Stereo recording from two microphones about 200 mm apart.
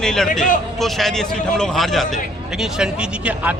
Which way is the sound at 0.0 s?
5° left (ahead or behind).